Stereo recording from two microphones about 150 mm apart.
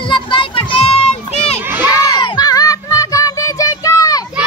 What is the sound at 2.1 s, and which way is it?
Child singing, 30° left (ahead or behind).